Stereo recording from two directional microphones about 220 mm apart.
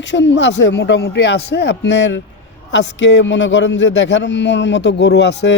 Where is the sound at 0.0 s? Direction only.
55° left (ahead or behind).